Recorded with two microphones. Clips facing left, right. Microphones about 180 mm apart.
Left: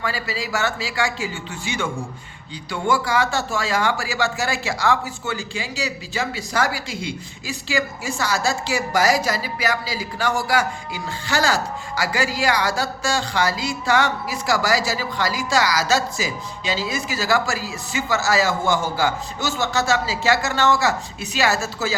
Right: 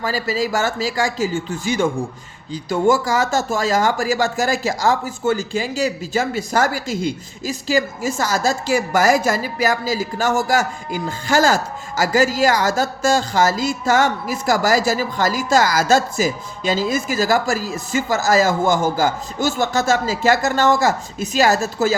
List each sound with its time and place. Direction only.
0.0 s speech: 40° right (ahead or behind)